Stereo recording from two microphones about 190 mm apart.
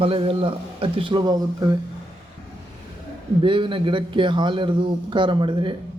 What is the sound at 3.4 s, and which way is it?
A man's voice, 25° right (ahead or behind).